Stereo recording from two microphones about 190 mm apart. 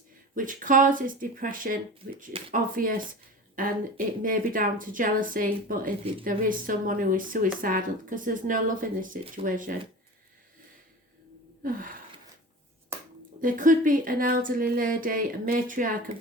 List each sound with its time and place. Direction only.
0.3 s speech: 45° right (ahead or behind)
11.6 s gasp: 45° right (ahead or behind)
13.4 s speech: 45° right (ahead or behind)